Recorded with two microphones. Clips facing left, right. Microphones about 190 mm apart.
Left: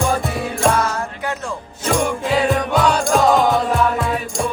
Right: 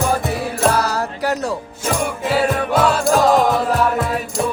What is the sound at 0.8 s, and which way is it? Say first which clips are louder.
Music: right 2 dB; 35° right (ahead or behind).